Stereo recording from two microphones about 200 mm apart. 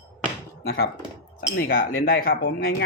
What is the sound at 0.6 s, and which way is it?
Speech, 50° left (ahead or behind).